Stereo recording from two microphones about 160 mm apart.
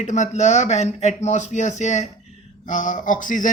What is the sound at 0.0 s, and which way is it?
Speech, 45° left (ahead or behind).